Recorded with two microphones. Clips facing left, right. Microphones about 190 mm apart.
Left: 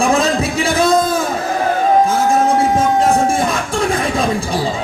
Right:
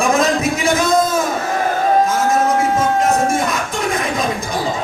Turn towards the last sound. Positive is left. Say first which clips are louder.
# left 3 dB
turn(degrees=30)  # may be behind; listen again after turning